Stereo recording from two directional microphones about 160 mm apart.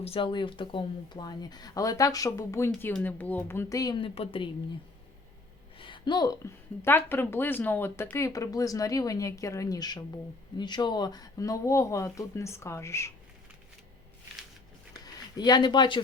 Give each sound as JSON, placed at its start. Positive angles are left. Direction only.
{"t": 0.0, "sound": "speech", "side_deg": 35}
{"t": 5.8, "sound": "speech", "side_deg": 30}
{"t": 14.9, "sound": "a sound", "side_deg": 25}